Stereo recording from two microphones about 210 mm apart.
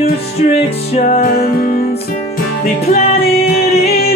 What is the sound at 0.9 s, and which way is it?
Music, 30° left (ahead or behind).